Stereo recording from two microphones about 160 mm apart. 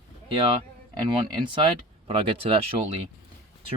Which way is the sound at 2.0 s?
35° right (ahead or behind).